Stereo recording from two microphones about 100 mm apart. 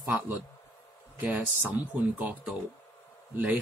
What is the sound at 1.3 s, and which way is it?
Speech, 20° right (ahead or behind).